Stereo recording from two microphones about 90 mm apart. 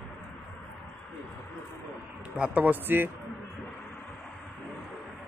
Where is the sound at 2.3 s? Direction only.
15° right (ahead or behind).